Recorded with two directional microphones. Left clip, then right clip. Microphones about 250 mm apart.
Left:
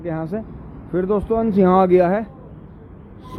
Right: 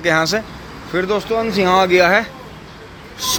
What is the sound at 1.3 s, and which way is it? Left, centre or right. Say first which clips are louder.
Speech: right 1 dB; left.